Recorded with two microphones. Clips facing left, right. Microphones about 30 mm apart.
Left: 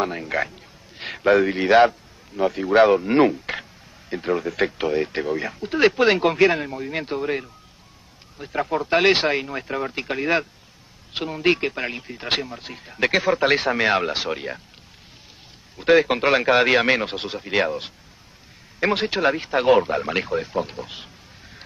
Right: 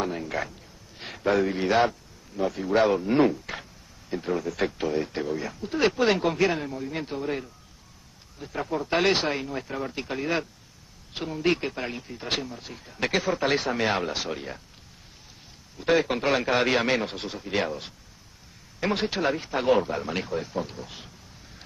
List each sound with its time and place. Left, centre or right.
0.0 s a man's voice: left
15.8 s speech: left